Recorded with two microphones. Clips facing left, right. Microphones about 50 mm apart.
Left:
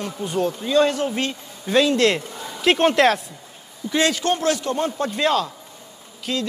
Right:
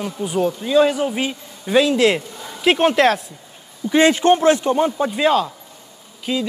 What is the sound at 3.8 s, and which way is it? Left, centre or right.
A man's voice, right.